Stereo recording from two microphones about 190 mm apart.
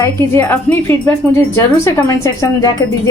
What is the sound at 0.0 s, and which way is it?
A woman's voice, 10° left (ahead or behind).